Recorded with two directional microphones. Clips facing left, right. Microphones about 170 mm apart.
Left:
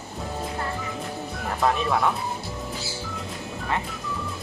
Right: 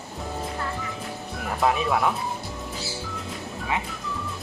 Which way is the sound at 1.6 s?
5° right (ahead or behind).